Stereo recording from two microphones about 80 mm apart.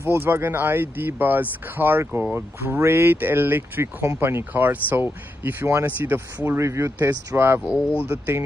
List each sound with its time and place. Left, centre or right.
0.0 s speech: right